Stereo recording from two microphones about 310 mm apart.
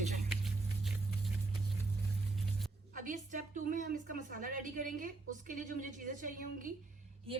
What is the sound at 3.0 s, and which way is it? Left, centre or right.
A woman's voice, right.